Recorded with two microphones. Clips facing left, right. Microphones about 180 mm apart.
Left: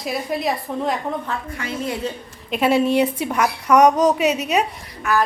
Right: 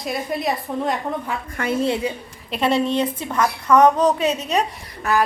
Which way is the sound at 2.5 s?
5° left (ahead or behind).